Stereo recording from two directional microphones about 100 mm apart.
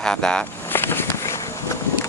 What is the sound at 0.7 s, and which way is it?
Walk, 20° left (ahead or behind).